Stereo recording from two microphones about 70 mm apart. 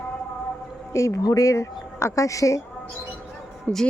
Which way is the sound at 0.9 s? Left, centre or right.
Left.